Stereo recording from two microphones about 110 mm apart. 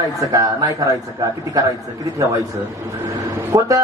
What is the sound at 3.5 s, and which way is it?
Speech, 35° right (ahead or behind).